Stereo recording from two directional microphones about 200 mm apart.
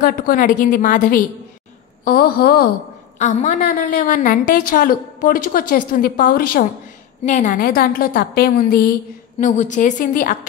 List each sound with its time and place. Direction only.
0.0 s a woman's voice: 45° left (ahead or behind)
3.2 s a woman's voice: 35° left (ahead or behind)